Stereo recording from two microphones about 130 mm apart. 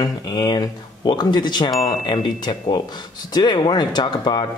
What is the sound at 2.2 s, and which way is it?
A man's voice, 35° left (ahead or behind).